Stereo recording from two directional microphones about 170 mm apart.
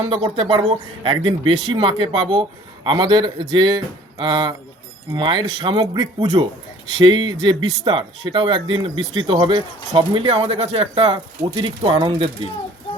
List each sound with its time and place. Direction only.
0.0 s speech: 35° right (ahead or behind)